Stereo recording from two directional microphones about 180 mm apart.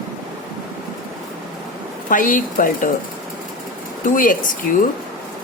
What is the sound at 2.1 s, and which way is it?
Speech, 50° left (ahead or behind).